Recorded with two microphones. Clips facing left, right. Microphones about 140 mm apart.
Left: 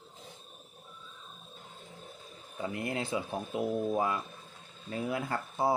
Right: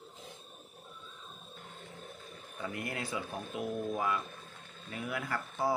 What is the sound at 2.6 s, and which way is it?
Speech, 25° left (ahead or behind).